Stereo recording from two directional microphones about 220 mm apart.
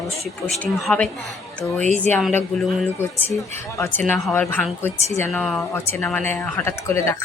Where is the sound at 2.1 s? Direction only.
5° left (ahead or behind).